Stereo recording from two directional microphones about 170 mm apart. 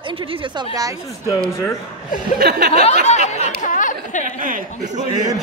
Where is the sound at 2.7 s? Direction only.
40° left (ahead or behind).